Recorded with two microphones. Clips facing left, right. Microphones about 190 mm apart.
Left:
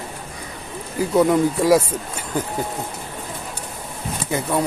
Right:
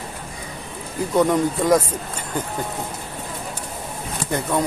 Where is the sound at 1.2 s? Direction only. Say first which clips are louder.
Left 2 dB; 5° left (ahead or behind).